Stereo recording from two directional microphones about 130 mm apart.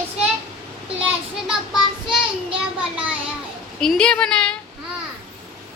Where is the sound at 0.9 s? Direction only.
10° right (ahead or behind).